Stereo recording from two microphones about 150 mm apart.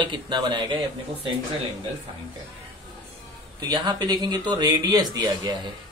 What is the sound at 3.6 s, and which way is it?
Speech, 30° right (ahead or behind).